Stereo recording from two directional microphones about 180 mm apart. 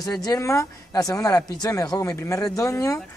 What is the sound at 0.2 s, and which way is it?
A man's voice, 20° left (ahead or behind).